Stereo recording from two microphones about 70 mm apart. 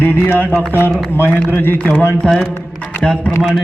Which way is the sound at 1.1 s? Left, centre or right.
Left.